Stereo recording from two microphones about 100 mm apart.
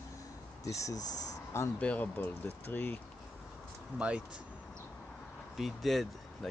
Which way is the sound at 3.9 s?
10° right (ahead or behind).